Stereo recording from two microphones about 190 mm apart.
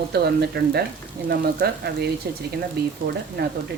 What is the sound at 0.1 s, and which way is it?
Speech, 60° right (ahead or behind).